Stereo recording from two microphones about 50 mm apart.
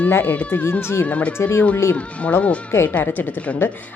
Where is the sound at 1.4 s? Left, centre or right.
Left.